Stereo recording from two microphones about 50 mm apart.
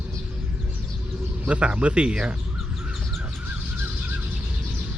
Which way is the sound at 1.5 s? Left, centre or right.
Right.